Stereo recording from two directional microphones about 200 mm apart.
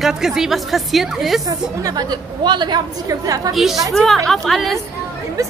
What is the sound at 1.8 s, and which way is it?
A woman's voice, 20° right (ahead or behind).